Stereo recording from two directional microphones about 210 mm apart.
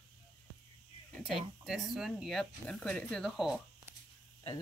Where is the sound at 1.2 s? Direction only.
Centre (ahead or behind).